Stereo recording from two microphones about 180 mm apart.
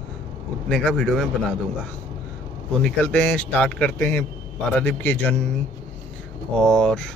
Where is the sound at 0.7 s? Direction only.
5° left (ahead or behind).